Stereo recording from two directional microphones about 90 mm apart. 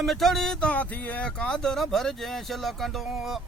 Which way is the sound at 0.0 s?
Centre (ahead or behind).